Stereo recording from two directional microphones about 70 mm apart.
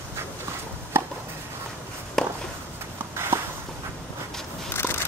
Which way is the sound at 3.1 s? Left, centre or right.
Right.